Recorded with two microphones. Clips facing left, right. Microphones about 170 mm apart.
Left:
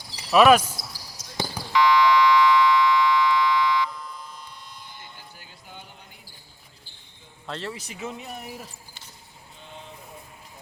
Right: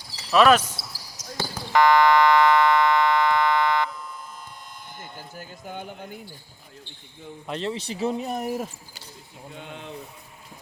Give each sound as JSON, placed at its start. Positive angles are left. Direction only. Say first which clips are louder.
{"t": 0.2, "sound": "cricket", "louder": "left 1 dB", "side_deg": 10}
{"t": 1.2, "sound": "basketball bounce", "louder": "right 6 dB", "side_deg": 30}
{"t": 1.7, "sound": "buzzer", "louder": "right 2 dB", "side_deg": -50}
{"t": 4.9, "sound": "doorbell", "louder": "right 6 dB", "side_deg": -45}
{"t": 7.4, "sound": "speech", "louder": "right 5 dB", "side_deg": -20}
{"t": 9.6, "sound": "a sound", "louder": "right 5 dB", "side_deg": -70}